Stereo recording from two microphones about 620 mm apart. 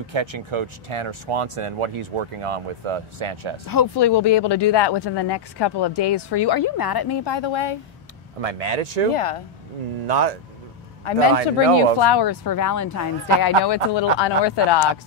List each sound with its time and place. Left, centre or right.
0.0 s speech: right
3.6 s speech: left
8.4 s speech: right
9.1 s speech: left
10.0 s speech: right
11.1 s a man's voice: left
13.7 s speech: left